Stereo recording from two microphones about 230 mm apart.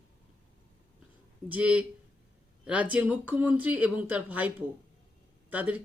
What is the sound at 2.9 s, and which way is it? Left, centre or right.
Speech, centre.